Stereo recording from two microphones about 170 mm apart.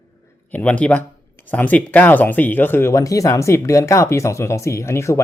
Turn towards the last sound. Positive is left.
turn(degrees=15)  # may be behind; listen again after turning